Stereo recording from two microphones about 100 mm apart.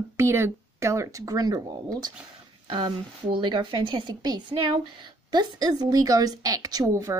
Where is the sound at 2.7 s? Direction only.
55° right (ahead or behind).